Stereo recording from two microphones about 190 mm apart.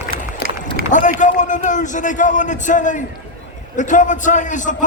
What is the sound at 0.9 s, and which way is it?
A man's voice, 40° left (ahead or behind).